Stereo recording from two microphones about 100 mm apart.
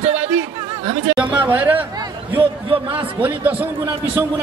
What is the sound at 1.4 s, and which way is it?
Speech, 15° right (ahead or behind).